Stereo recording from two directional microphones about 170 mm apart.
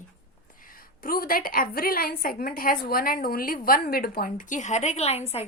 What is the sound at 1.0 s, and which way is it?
A woman's voice, 55° left (ahead or behind).